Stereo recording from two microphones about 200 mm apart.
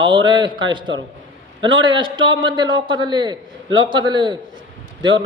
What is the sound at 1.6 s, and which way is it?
A man's voice, 25° right (ahead or behind).